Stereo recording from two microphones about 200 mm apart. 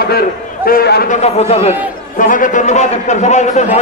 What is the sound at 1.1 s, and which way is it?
A man's voice, 30° left (ahead or behind).